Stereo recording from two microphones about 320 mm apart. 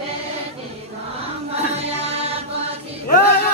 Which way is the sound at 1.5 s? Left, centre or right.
Centre.